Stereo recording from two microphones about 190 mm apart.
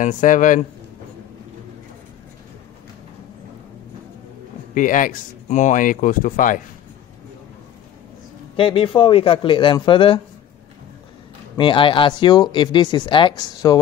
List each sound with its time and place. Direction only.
0.0 s speech: 40° left (ahead or behind)
4.7 s speech: 45° left (ahead or behind)
8.5 s speech: 25° left (ahead or behind)
11.5 s speech: 25° left (ahead or behind)